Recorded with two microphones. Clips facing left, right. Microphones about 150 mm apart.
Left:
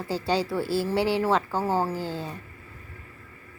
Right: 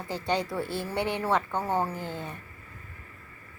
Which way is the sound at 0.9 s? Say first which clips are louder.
Left 5 dB; 30° left (ahead or behind).